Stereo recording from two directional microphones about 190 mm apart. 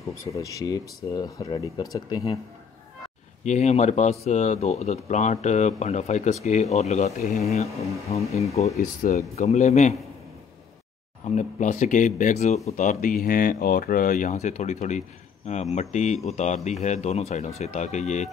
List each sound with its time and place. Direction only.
0.2 s speech: 15° left (ahead or behind)
3.4 s speech: 35° left (ahead or behind)
11.2 s speech: 40° left (ahead or behind)